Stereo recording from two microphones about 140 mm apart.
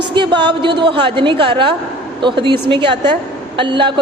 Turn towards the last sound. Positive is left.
turn(degrees=-35)  # may be behind; listen again after turning